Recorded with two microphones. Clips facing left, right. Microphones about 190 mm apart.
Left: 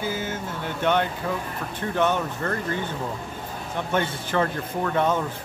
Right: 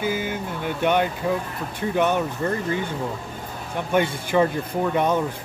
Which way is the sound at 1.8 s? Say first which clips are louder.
Right 2 dB; 15° right (ahead or behind).